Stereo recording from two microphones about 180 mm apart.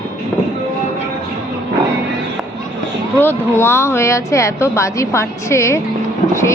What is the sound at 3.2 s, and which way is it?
Speech, 10° left (ahead or behind).